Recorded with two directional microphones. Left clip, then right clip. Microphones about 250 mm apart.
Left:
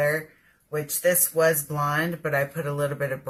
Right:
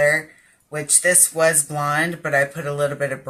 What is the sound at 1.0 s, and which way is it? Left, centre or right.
Speech, centre.